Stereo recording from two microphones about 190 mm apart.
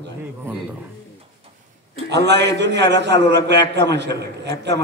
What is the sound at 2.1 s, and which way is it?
A man's voice, 65° right (ahead or behind).